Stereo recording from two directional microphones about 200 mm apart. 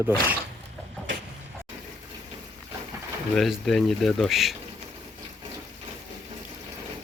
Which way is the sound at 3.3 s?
Centre (ahead or behind).